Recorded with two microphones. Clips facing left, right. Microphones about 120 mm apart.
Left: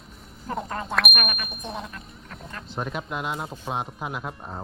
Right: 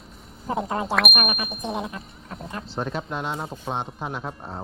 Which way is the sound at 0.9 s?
Centre (ahead or behind).